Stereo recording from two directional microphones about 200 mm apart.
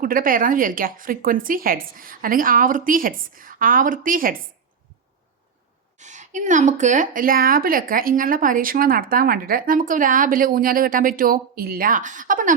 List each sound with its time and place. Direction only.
0.0 s speech: 45° right (ahead or behind)
6.0 s speech: 35° right (ahead or behind)